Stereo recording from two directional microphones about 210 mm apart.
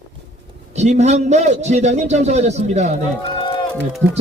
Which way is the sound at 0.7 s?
30° right (ahead or behind).